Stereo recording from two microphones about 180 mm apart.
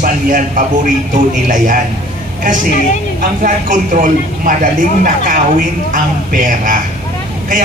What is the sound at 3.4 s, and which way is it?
Speech, 45° right (ahead or behind).